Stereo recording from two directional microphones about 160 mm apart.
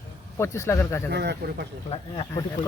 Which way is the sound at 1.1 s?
90° right.